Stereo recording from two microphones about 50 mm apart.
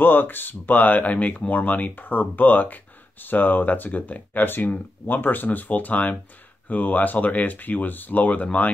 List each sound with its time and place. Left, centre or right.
0.0 s speech: left